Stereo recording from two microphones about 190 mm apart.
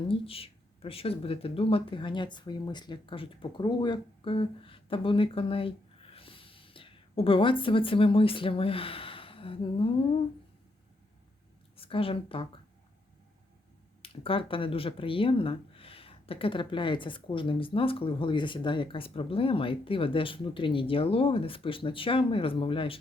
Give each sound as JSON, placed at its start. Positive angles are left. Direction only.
{"t": 0.1, "sound": "speech", "side_deg": 30}
{"t": 11.8, "sound": "speech", "side_deg": 30}
{"t": 14.0, "sound": "speech", "side_deg": 30}